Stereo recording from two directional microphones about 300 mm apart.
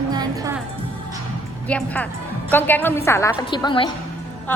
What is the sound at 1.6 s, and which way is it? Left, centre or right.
A woman's voice, centre.